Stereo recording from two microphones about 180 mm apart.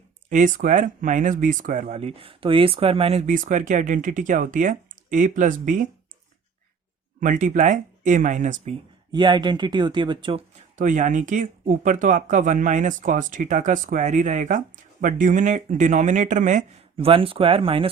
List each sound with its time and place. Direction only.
0.3 s speech: 45° right (ahead or behind)
7.2 s speech: 45° right (ahead or behind)
9.1 s speech: 25° right (ahead or behind)
10.8 s speech: 45° right (ahead or behind)
17.1 s speech: 30° right (ahead or behind)